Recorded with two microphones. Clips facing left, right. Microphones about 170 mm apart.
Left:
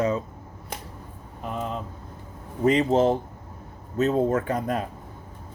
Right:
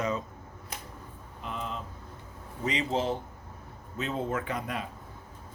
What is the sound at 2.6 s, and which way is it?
Speech, 45° left (ahead or behind).